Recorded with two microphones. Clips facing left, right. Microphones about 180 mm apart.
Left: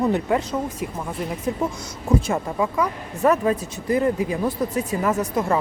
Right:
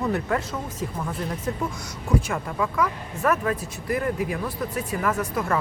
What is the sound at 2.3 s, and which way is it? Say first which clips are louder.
Speech: left 4 dB; 25° left (ahead or behind).